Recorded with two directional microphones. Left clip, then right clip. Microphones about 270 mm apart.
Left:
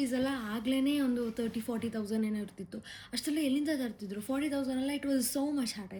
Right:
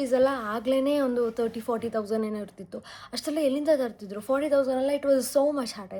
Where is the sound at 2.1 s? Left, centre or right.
Centre.